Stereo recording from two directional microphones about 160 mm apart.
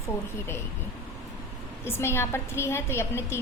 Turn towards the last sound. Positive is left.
turn(degrees=15)  # may be behind; listen again after turning